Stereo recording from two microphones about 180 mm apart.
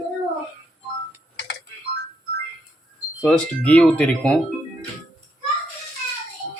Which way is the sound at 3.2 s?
5° left (ahead or behind).